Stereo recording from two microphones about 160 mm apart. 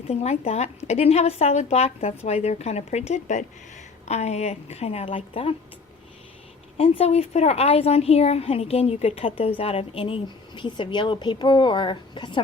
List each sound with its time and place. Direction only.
0.1 s a woman's voice: 40° left (ahead or behind)
6.7 s a woman's voice: 35° left (ahead or behind)